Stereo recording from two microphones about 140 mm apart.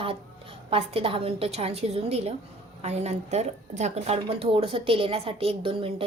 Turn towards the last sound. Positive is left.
turn(degrees=-40)  # may be behind; listen again after turning